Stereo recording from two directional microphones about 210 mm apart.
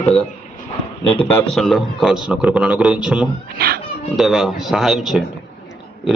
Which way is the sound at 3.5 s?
45° right (ahead or behind).